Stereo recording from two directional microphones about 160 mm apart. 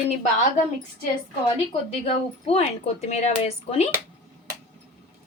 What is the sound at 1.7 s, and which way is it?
A woman's voice, 40° left (ahead or behind).